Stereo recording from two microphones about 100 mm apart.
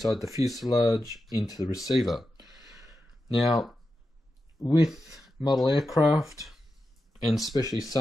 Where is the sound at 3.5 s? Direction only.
Centre (ahead or behind).